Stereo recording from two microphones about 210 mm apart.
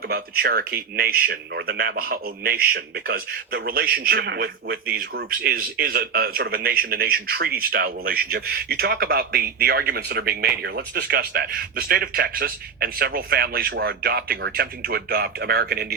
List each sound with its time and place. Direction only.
0.1 s a man's voice: 45° right (ahead or behind)